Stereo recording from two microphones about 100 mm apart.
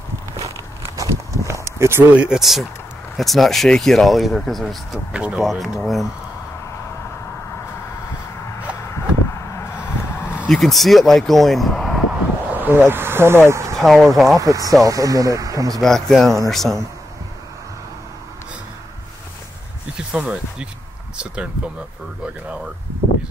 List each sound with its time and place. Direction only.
0.9 s walk: 30° right (ahead or behind)
2.1 s speech: 5° right (ahead or behind)
5.1 s speech: 10° right (ahead or behind)
10.5 s speech: centre (ahead or behind)
12.1 s a sound: 15° right (ahead or behind)
13.7 s speech: centre (ahead or behind)
14.4 s speech: 35° right (ahead or behind)
15.8 s speech: 5° left (ahead or behind)
20.0 s speech: 10° right (ahead or behind)